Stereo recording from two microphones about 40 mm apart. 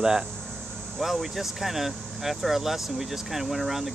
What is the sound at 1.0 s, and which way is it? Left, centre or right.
Speech, centre.